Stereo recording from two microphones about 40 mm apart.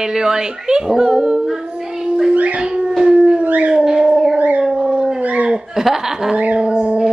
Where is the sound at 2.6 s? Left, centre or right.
Right.